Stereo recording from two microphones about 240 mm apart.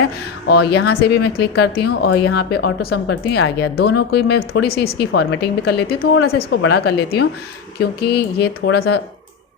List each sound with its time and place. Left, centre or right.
0.4 s speech: left